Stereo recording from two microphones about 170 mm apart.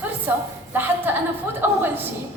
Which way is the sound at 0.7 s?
10° right (ahead or behind).